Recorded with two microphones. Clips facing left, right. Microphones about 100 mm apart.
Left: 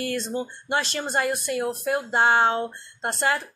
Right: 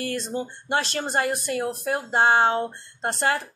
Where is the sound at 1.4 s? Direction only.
40° right (ahead or behind).